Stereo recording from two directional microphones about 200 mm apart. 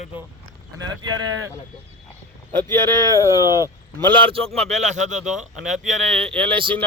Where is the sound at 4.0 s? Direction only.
25° right (ahead or behind).